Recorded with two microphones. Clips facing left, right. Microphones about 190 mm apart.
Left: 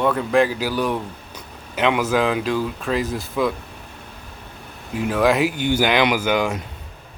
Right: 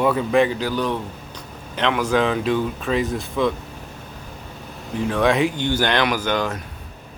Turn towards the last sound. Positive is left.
turn(degrees=10)  # may be behind; listen again after turning